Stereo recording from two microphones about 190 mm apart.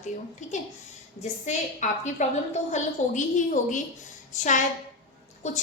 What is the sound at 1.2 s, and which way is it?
A woman's voice, 40° left (ahead or behind).